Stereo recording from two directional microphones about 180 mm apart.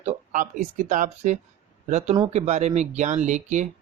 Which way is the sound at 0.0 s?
45° right (ahead or behind).